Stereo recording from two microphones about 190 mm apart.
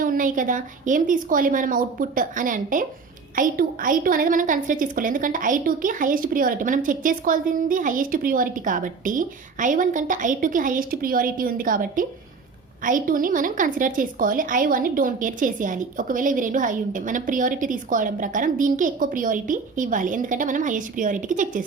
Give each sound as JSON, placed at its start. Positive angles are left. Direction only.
{"t": 0.0, "sound": "a woman's voice", "side_deg": -45}